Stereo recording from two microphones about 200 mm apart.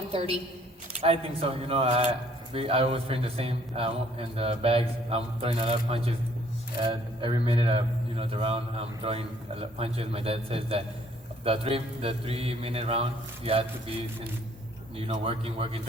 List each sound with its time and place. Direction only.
0.1 s a woman's voice: 30° right (ahead or behind)
14.9 s a man's voice: 30° right (ahead or behind)